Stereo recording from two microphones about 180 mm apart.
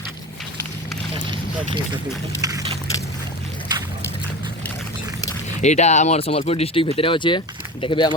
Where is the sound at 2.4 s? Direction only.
20° right (ahead or behind).